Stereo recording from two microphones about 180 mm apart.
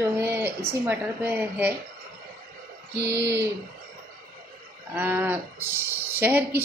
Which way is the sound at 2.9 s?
70° right (ahead or behind).